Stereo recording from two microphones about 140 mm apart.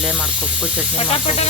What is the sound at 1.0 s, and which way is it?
Snake, 45° left (ahead or behind).